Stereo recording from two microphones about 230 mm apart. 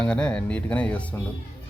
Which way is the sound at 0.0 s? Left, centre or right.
Centre.